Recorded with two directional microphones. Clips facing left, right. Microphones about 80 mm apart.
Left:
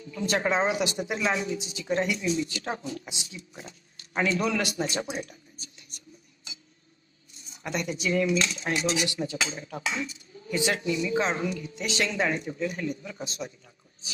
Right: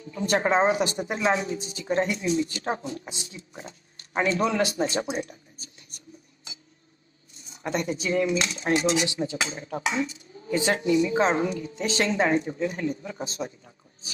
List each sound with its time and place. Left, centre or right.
0.0 s a woman's voice: right
5.1 s a sound: right
7.4 s cutlery: right
8.4 s a woman's voice: right